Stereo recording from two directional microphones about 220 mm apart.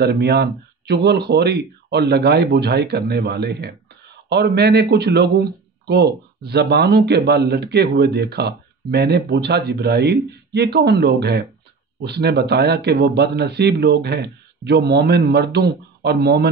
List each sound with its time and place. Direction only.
0.0 s a man's voice: 50° right (ahead or behind)